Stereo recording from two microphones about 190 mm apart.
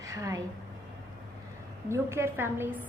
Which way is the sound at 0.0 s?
15° right (ahead or behind).